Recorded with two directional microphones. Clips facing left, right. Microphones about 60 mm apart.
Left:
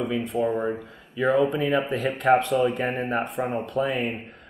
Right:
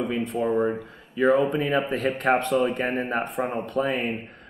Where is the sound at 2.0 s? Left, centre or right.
Centre.